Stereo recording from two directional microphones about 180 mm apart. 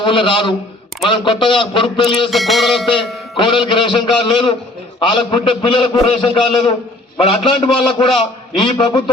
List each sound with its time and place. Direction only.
0.0 s a man's voice: 25° left (ahead or behind)
2.3 s music: centre (ahead or behind)
3.3 s a man's voice: 25° left (ahead or behind)